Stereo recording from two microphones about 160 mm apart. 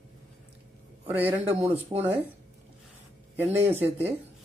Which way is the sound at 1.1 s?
10° right (ahead or behind).